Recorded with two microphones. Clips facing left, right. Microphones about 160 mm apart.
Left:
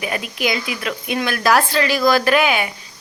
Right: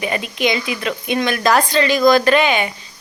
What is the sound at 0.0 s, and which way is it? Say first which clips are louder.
Speech: right 3 dB; 5° left (ahead or behind).